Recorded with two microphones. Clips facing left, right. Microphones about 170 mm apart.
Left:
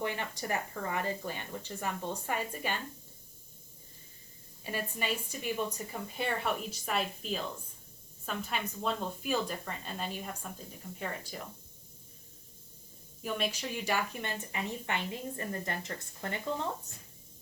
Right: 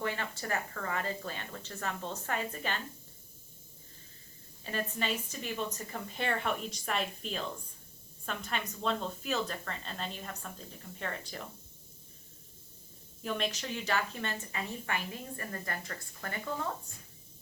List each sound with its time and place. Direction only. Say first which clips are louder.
0.0 s speech: left 1 dB; 15° left (ahead or behind)
4.6 s speech: right 1 dB; 10° left (ahead or behind)
13.2 s a woman's voice: even; 10° left (ahead or behind)